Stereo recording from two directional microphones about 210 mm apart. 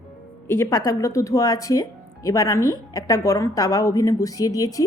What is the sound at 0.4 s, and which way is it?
Speech, 10° left (ahead or behind).